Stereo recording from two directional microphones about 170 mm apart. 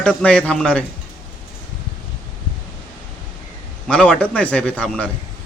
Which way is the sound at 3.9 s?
5° left (ahead or behind).